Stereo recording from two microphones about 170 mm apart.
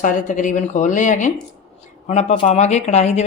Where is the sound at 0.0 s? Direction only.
50° left (ahead or behind).